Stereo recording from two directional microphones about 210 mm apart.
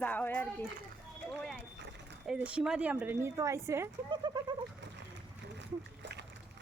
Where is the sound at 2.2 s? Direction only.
5° right (ahead or behind); by 4.5 s 20° right (ahead or behind).